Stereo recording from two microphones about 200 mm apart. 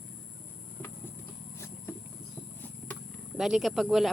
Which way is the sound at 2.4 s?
10° left (ahead or behind).